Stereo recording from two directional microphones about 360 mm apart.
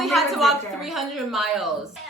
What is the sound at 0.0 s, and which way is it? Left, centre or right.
Speech, centre.